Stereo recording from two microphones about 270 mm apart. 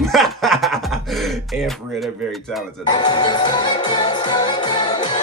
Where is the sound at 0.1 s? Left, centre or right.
Centre.